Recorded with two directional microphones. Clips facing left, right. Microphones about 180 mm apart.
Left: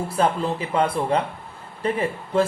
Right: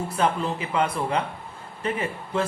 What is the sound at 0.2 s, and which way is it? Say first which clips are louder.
A man's voice: left 3 dB; 35° left (ahead or behind).